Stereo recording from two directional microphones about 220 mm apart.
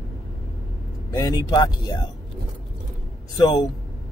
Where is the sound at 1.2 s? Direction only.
20° left (ahead or behind).